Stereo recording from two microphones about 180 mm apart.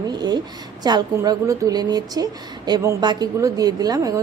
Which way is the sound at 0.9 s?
20° right (ahead or behind).